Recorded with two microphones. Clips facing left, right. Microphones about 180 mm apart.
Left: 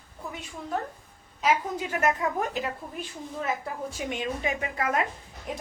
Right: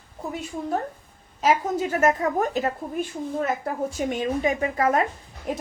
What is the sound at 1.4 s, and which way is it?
A woman's voice, 45° right (ahead or behind).